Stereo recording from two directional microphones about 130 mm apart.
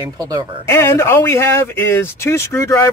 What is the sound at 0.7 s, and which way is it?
Speech, 20° left (ahead or behind).